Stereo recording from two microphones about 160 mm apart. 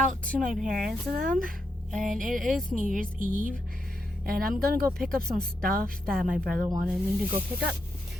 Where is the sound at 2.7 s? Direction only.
55° right (ahead or behind).